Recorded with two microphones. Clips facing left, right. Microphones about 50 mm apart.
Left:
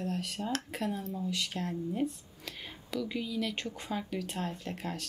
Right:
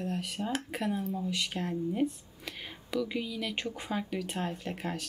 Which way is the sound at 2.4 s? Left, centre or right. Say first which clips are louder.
Right 2 dB; centre.